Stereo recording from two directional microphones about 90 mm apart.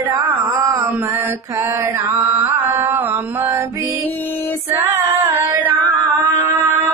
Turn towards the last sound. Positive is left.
turn(degrees=-25)  # may be behind; listen again after turning